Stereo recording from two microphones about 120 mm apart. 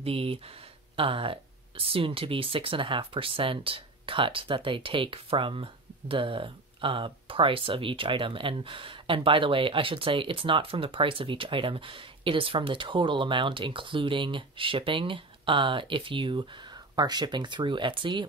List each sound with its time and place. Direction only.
0.0 s speech: 50° right (ahead or behind)